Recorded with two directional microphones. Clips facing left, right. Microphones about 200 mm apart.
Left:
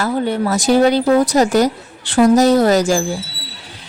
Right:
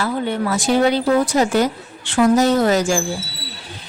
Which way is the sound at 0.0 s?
40° left (ahead or behind).